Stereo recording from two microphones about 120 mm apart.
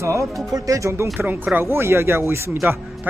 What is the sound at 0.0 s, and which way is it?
Speech, 25° right (ahead or behind).